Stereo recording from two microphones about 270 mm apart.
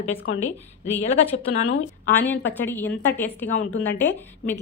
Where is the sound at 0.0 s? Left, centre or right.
Left.